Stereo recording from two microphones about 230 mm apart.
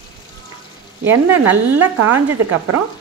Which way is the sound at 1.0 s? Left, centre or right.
Centre.